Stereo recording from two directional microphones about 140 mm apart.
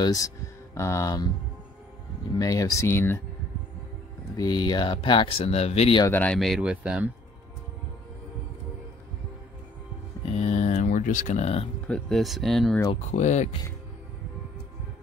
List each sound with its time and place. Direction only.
0.0 s speech: 25° left (ahead or behind)
2.3 s speech: 25° left (ahead or behind)
4.4 s speech: 30° left (ahead or behind); by 5.9 s 50° left (ahead or behind)
6.1 s speech: 5° left (ahead or behind)
10.3 s a sound: 55° left (ahead or behind)
11.9 s speech: centre (ahead or behind)
13.1 s speech: 55° left (ahead or behind)